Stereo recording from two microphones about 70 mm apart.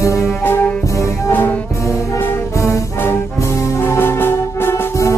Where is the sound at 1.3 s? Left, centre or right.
Left.